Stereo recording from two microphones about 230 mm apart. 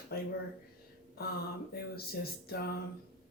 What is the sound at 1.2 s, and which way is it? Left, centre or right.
Speech, left.